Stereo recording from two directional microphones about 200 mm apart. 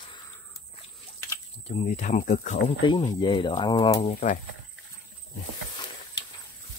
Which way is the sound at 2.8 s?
20° left (ahead or behind).